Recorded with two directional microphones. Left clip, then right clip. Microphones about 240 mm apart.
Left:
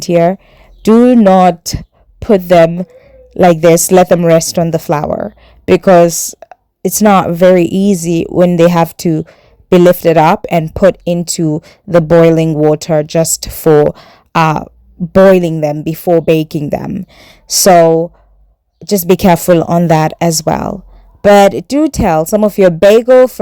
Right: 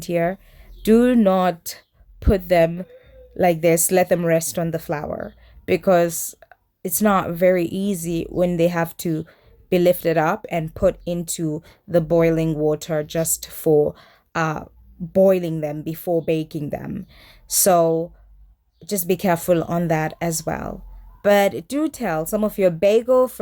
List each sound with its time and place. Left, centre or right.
0.0 s a woman's voice: left